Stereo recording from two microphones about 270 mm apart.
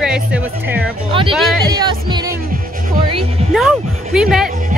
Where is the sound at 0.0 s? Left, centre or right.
Centre.